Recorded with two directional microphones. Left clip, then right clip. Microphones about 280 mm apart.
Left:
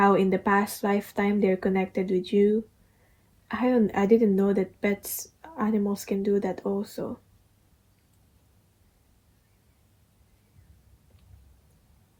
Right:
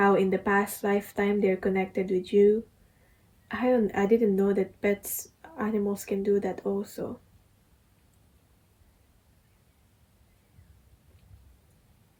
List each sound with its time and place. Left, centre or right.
0.0 s speech: centre
5.0 s a sound: centre
5.7 s speech: centre